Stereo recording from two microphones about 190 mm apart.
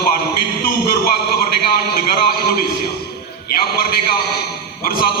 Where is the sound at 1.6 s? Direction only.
55° left (ahead or behind).